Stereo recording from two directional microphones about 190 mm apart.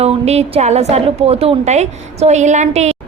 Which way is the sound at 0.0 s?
35° right (ahead or behind).